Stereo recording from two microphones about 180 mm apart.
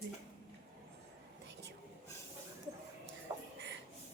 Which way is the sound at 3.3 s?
15° right (ahead or behind).